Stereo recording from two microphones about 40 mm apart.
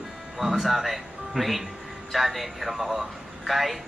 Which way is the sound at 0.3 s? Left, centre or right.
Centre.